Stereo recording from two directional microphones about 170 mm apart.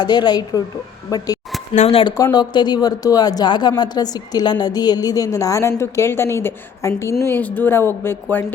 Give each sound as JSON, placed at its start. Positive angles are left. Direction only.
{"t": 0.0, "sound": "speech", "side_deg": 25}
{"t": 1.7, "sound": "speech", "side_deg": 40}
{"t": 2.1, "sound": "speech", "side_deg": 20}